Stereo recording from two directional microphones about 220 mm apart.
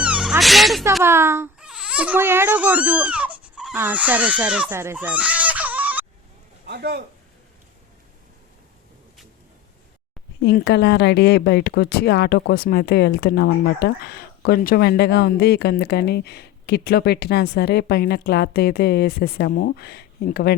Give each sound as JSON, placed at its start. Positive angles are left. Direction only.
{"t": 0.0, "sound": "cat", "side_deg": -5}
{"t": 1.0, "sound": "speech", "side_deg": -10}
{"t": 6.7, "sound": "a man's voice", "side_deg": -45}
{"t": 10.4, "sound": "speech", "side_deg": 50}